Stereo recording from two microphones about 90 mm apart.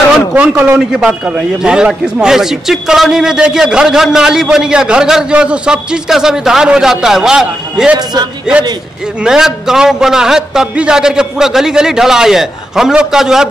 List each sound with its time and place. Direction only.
0.3 s a man's voice: 15° right (ahead or behind)
7.9 s a man's voice: 50° right (ahead or behind)
9.2 s a man's voice: 5° right (ahead or behind)